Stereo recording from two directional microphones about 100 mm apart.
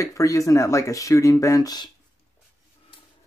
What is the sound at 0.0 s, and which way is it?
Speech, 35° left (ahead or behind).